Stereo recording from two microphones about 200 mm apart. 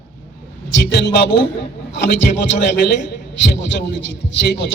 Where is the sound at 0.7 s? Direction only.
60° left (ahead or behind).